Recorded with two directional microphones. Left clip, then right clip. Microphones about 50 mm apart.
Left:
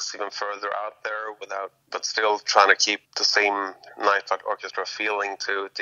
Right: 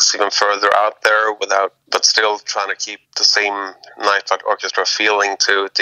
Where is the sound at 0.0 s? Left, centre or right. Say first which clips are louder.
Right 15 dB; right.